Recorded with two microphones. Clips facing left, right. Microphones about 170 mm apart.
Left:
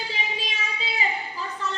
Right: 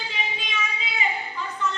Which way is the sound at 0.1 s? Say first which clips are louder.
Even; 35° left (ahead or behind).